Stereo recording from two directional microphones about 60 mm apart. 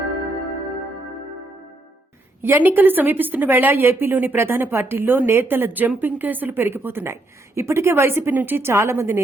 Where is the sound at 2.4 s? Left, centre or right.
Right.